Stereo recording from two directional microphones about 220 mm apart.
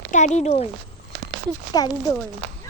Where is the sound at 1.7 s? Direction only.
15° left (ahead or behind).